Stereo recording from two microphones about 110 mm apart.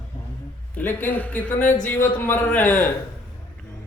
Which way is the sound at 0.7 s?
15° left (ahead or behind).